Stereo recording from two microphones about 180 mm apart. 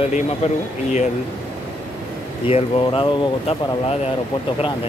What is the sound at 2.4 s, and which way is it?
Speech, 30° left (ahead or behind).